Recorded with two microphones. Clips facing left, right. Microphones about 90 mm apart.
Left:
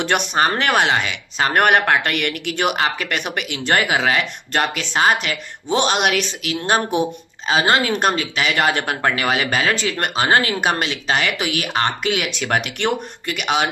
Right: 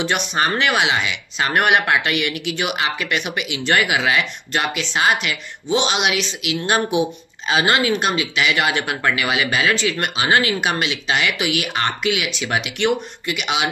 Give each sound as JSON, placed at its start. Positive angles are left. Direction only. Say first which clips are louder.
{"t": 0.3, "sound": "speech", "louder": "left 1 dB", "side_deg": 40}